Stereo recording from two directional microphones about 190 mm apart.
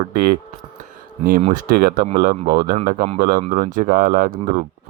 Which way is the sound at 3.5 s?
45° right (ahead or behind).